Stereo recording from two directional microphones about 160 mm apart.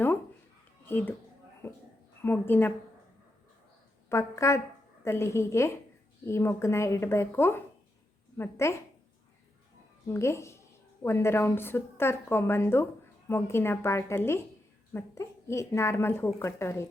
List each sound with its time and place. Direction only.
0.9 s speech: 10° left (ahead or behind)
4.1 s speech: 15° left (ahead or behind)
10.1 s speech: 15° left (ahead or behind)